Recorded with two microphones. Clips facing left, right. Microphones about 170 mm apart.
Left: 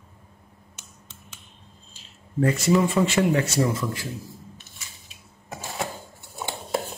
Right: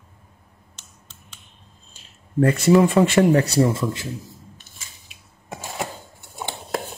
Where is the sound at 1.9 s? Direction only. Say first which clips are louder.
Right 5 dB; 55° right (ahead or behind).